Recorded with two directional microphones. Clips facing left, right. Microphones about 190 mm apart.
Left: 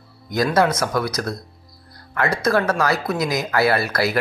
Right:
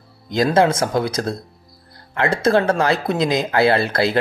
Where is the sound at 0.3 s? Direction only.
25° right (ahead or behind).